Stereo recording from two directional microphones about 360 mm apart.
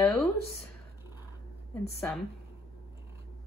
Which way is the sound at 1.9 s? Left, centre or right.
Centre.